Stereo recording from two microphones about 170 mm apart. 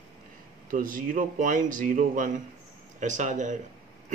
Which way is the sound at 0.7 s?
55° right (ahead or behind).